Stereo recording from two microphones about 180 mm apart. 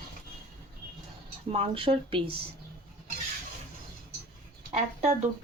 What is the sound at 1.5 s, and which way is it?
Speech, 35° right (ahead or behind).